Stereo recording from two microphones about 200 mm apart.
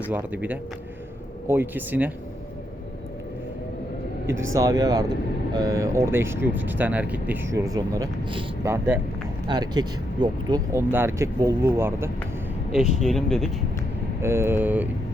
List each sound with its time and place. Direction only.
0.1 s speech: 10° right (ahead or behind)
4.5 s speech: 15° right (ahead or behind); by 13.5 s centre (ahead or behind)
14.2 s speech: 10° right (ahead or behind)